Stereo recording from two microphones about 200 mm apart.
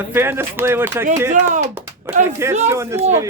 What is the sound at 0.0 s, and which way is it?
Speech, 10° right (ahead or behind).